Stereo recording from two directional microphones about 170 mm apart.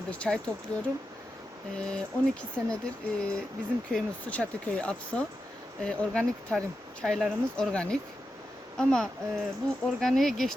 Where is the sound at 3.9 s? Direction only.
5° left (ahead or behind).